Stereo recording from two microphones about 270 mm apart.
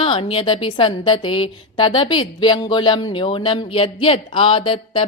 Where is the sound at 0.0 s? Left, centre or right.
Centre.